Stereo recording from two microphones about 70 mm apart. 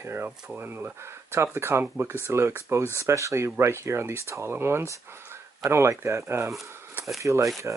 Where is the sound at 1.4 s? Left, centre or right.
Right.